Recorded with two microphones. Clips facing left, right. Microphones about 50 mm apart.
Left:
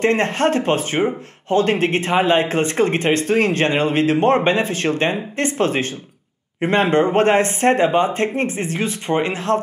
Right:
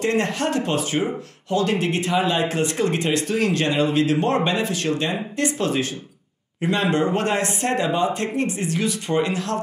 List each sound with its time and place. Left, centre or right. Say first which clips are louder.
0.0 s speech: left 5 dB; left